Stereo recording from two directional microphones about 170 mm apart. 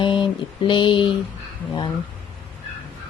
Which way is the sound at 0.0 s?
30° left (ahead or behind).